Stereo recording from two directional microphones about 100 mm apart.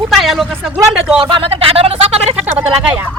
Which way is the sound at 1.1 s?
70° right (ahead or behind).